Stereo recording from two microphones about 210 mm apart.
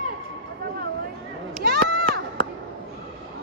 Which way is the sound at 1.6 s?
50° right (ahead or behind).